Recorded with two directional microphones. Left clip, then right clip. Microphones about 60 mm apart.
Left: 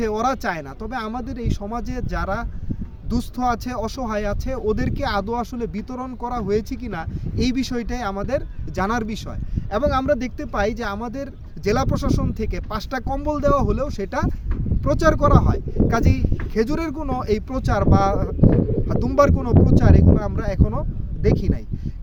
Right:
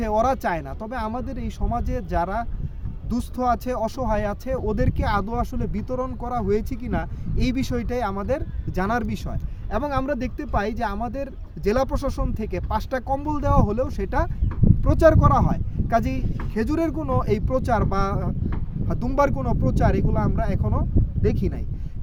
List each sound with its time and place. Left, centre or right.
0.0 s speech: right
9.7 s speech: right